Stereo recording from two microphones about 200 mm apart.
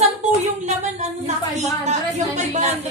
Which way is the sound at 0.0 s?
35° right (ahead or behind).